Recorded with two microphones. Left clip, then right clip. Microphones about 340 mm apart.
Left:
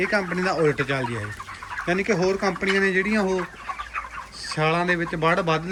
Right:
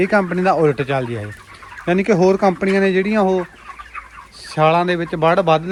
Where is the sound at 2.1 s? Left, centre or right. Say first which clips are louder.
Right 9 dB; right.